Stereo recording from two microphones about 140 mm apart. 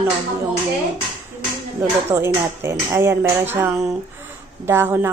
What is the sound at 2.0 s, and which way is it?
Speech, 15° right (ahead or behind).